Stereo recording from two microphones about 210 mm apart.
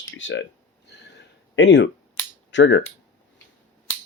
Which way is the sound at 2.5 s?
55° left (ahead or behind).